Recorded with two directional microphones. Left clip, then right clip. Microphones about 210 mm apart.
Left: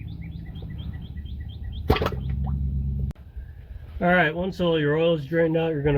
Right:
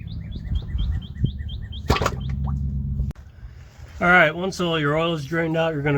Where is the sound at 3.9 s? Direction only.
45° right (ahead or behind).